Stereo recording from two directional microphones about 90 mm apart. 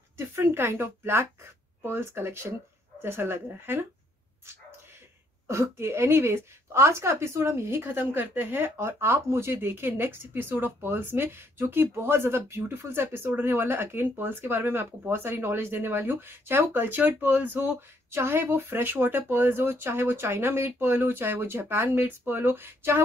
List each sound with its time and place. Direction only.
0.4 s a woman's voice: 30° right (ahead or behind)
5.5 s a woman's voice: 30° right (ahead or behind)